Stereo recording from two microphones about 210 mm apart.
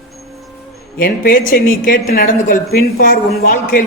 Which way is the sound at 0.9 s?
45° left (ahead or behind).